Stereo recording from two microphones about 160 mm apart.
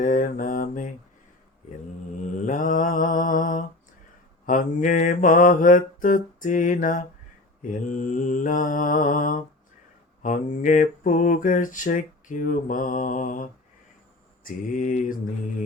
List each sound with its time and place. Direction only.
0.0 s mantra: 55° left (ahead or behind)
2.3 s mantra: 55° left (ahead or behind)